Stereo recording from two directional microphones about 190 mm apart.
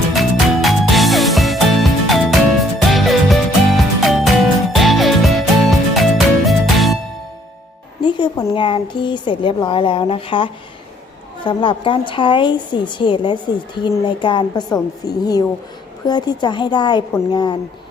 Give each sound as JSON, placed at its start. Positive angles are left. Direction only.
{"t": 0.1, "sound": "music", "side_deg": 0}
{"t": 8.0, "sound": "speech", "side_deg": 25}